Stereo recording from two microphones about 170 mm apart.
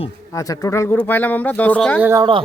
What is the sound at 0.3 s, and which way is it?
Speech, 20° left (ahead or behind).